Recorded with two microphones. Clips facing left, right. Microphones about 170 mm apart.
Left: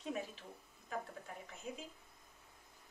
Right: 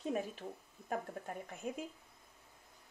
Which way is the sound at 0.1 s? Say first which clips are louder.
Right 3 dB; 50° right (ahead or behind).